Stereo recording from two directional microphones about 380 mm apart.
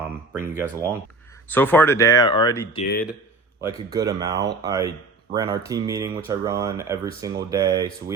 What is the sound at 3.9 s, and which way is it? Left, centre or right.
Speech, centre.